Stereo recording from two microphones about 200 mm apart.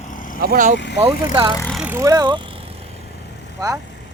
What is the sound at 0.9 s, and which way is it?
Speech, 20° right (ahead or behind).